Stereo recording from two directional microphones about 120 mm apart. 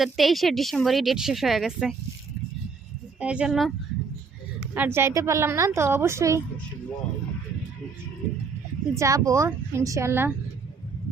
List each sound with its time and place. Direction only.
0.0 s speech: centre (ahead or behind)
3.2 s speech: 10° right (ahead or behind)
4.7 s a woman's voice: 15° right (ahead or behind)
9.0 s a woman's voice: 30° right (ahead or behind)